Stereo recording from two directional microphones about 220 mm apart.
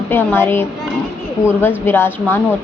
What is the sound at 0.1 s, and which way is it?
A woman's voice, 10° left (ahead or behind).